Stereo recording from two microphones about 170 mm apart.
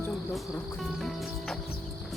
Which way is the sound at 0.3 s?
Centre (ahead or behind).